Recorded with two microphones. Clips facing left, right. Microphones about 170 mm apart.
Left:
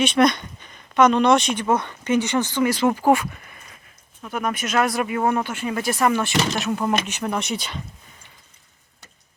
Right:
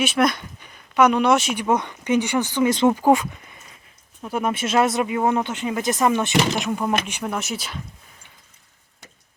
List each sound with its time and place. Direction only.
0.0 s speech: 5° right (ahead or behind)
6.7 s speech: 5° right (ahead or behind)